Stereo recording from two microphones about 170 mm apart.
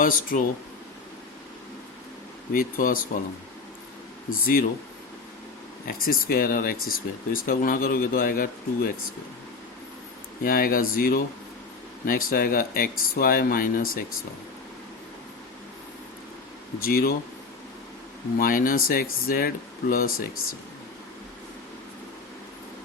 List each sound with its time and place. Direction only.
0.0 s speech: 55° left (ahead or behind)
2.5 s speech: 60° left (ahead or behind)
4.3 s speech: 60° left (ahead or behind)
5.9 s speech: 60° left (ahead or behind)
10.4 s speech: 60° left (ahead or behind)
16.8 s speech: 60° left (ahead or behind)
18.3 s speech: 55° left (ahead or behind)